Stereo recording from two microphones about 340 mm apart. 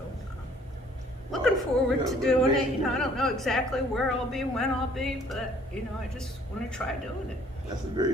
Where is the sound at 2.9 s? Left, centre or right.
Centre.